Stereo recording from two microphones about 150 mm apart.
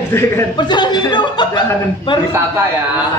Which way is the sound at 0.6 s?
30° left (ahead or behind).